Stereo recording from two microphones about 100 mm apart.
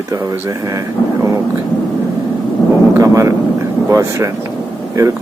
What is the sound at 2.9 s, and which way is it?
Vehicle, 35° right (ahead or behind).